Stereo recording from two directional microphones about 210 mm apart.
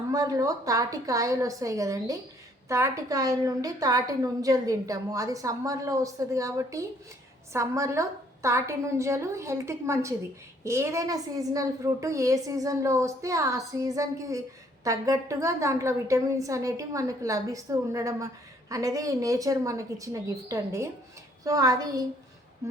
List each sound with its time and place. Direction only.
0.1 s a woman's voice: 15° right (ahead or behind)